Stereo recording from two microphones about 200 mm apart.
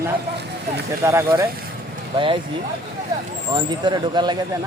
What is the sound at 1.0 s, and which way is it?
Speech, 15° right (ahead or behind).